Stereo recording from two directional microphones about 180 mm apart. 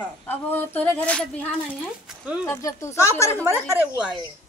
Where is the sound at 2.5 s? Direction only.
20° left (ahead or behind).